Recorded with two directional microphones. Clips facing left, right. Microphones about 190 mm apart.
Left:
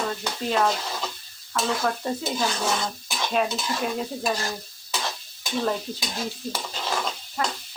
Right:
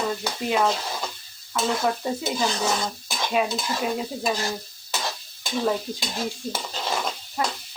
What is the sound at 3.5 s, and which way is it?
Speech, 5° right (ahead or behind).